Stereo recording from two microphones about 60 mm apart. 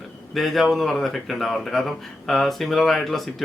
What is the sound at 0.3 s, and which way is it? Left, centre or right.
Speech, centre.